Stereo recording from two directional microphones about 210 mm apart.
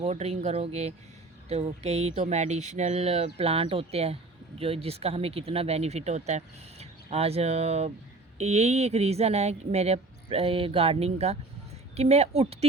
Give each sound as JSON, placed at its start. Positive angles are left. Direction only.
{"t": 0.0, "sound": "speech", "side_deg": -30}